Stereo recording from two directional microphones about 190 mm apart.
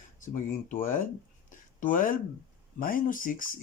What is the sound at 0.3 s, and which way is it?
Speech, 45° left (ahead or behind).